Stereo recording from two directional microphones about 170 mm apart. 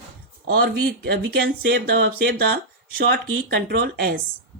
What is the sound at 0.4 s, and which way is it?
Speech, 65° right (ahead or behind).